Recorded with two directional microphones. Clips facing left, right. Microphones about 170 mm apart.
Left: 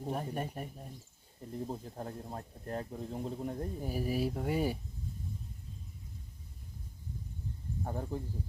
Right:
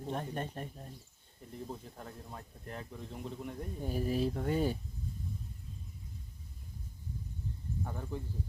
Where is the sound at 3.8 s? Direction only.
10° left (ahead or behind).